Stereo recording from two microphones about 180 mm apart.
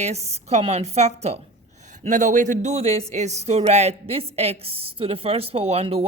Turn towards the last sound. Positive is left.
turn(degrees=-35)  # may be behind; listen again after turning